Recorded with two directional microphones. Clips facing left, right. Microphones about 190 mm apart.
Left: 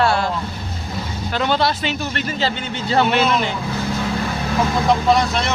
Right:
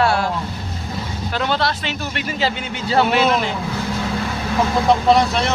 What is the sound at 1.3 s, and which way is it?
Speech, centre (ahead or behind).